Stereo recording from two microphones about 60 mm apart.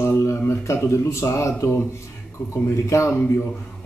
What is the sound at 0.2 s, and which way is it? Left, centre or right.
A man's voice, left.